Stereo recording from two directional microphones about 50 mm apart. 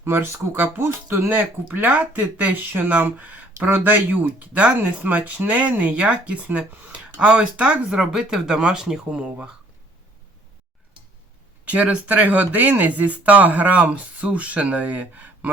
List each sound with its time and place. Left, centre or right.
0.0 s speech: right
1.3 s speech: right
11.6 s speech: right